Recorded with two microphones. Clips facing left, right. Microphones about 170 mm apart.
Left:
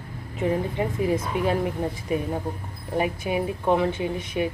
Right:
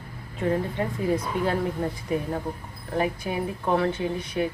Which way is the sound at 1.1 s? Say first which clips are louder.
Left 1 dB; 20° left (ahead or behind).